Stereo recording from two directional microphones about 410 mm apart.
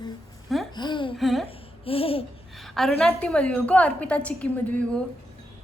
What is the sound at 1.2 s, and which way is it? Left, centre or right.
Speech, centre.